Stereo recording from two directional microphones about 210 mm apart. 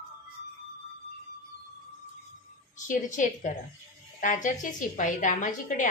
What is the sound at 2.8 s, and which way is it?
A woman's voice, 35° left (ahead or behind).